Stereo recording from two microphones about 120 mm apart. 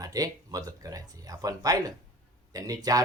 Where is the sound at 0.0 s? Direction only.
30° right (ahead or behind).